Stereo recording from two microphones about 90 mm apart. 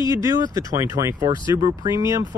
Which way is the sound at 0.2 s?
35° right (ahead or behind).